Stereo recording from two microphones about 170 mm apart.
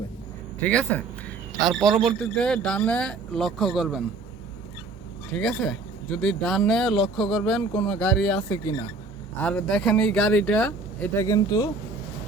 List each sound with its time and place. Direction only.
0.6 s speech: 5° left (ahead or behind)
5.3 s speech: centre (ahead or behind)
8.6 s speech: 25° left (ahead or behind)
9.4 s speech: 5° left (ahead or behind); by 11.7 s 20° left (ahead or behind)